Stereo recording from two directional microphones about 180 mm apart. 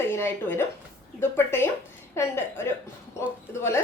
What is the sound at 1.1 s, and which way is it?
A woman's voice, 15° left (ahead or behind).